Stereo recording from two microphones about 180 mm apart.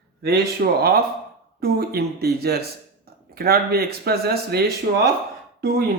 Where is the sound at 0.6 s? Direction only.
60° right (ahead or behind).